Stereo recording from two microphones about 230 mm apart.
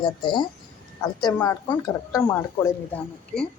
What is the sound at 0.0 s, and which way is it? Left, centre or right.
A woman's voice, centre.